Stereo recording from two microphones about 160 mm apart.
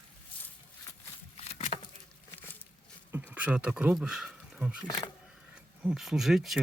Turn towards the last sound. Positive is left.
turn(degrees=0)  # may be behind; listen again after turning